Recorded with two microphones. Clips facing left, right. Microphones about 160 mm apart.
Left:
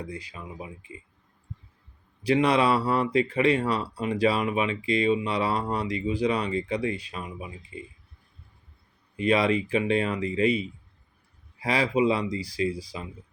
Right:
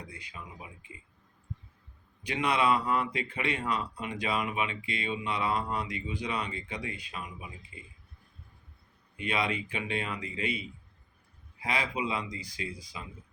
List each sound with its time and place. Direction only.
0.0 s speech: 35° left (ahead or behind)
2.2 s speech: 35° left (ahead or behind)
9.1 s speech: 35° left (ahead or behind)